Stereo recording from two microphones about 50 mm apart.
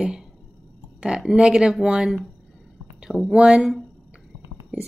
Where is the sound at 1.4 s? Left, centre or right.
Centre.